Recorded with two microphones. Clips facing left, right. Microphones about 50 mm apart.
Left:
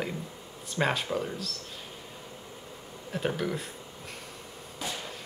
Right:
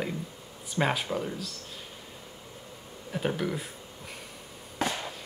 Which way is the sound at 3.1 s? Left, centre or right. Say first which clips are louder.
Even; centre.